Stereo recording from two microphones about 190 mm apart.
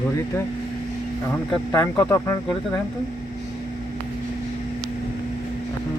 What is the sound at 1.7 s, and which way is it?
Speech, 20° left (ahead or behind).